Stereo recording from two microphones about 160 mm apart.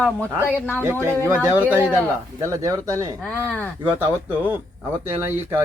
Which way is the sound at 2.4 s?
20° right (ahead or behind).